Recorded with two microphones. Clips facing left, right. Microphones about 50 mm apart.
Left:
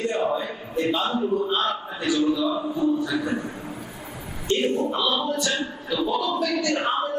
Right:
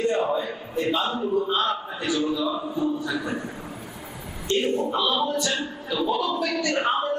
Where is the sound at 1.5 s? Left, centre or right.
Right.